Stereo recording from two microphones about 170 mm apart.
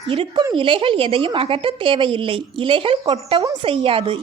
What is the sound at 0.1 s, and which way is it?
A woman's voice, 30° right (ahead or behind).